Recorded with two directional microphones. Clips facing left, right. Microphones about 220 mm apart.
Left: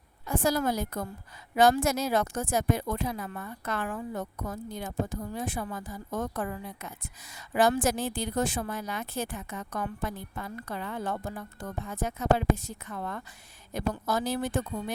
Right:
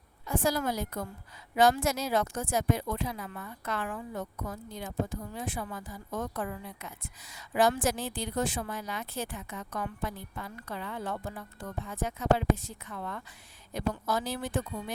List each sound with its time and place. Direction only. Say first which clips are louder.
0.3 s a woman's voice: left 2 dB; 45° left (ahead or behind)